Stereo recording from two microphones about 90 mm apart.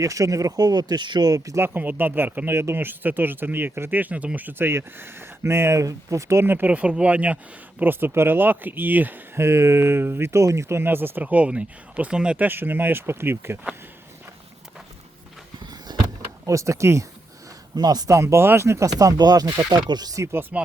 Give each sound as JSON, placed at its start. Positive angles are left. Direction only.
{"t": 0.0, "sound": "speech", "side_deg": -40}
{"t": 1.5, "sound": "speech", "side_deg": -25}
{"t": 12.5, "sound": "speech", "side_deg": -25}
{"t": 15.6, "sound": "vehicle", "side_deg": -50}
{"t": 16.5, "sound": "speech", "side_deg": -35}
{"t": 17.7, "sound": "speech", "side_deg": -45}
{"t": 18.1, "sound": "speech", "side_deg": -30}